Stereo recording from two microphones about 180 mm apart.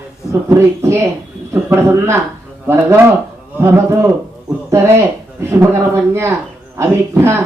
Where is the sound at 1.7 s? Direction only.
15° right (ahead or behind).